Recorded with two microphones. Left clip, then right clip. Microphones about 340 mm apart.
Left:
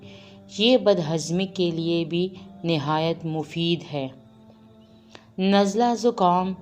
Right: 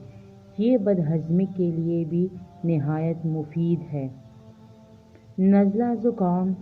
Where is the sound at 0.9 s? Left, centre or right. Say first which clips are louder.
Left 4 dB; left.